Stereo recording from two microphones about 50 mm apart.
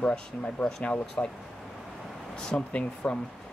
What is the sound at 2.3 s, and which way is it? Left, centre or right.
Speech, centre.